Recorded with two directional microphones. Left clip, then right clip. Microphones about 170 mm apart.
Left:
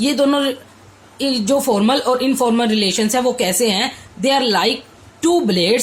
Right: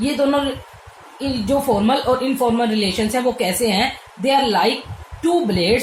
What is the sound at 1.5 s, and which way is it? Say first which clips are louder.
A woman's voice: left 1 dB; 40° left (ahead or behind).